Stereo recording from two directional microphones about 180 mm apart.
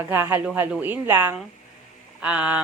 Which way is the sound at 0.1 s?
10° right (ahead or behind).